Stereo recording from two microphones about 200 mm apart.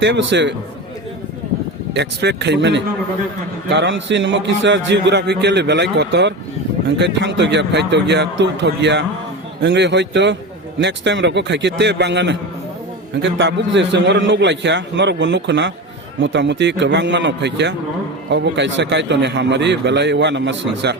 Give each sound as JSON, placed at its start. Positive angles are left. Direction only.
{"t": 0.0, "sound": "a man's voice", "side_deg": -65}
{"t": 1.9, "sound": "a man's voice", "side_deg": -60}